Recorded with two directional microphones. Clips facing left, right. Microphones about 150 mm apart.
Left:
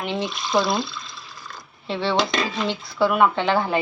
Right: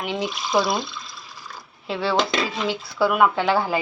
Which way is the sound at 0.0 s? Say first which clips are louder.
Even; 5° right (ahead or behind).